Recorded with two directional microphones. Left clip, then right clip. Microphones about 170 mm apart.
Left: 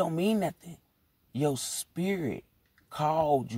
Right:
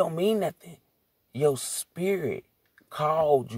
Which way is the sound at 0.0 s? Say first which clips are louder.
Right 4 dB; 30° right (ahead or behind).